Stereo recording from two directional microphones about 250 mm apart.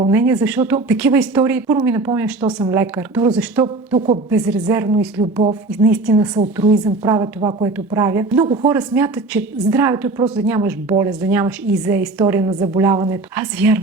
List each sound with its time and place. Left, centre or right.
0.1 s a woman's voice: centre
3.9 s speech: right
4.3 s a woman's voice: centre
5.2 s speech: right
5.7 s a woman's voice: centre